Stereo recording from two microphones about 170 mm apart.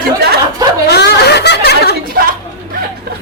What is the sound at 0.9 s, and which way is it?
Speech, 70° left (ahead or behind).